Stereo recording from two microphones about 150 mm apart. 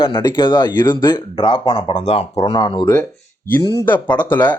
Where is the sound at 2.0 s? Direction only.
45° left (ahead or behind).